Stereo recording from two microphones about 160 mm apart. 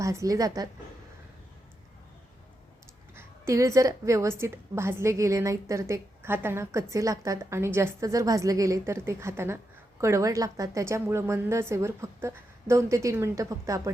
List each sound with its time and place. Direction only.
0.0 s a woman's voice: 20° right (ahead or behind)
3.2 s a woman's voice: 20° right (ahead or behind)